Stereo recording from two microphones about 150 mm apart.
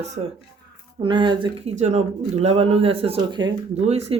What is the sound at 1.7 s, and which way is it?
Speech, 50° right (ahead or behind).